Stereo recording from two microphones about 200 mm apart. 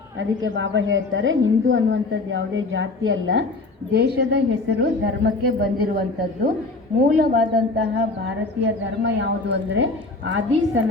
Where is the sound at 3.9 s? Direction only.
55° right (ahead or behind).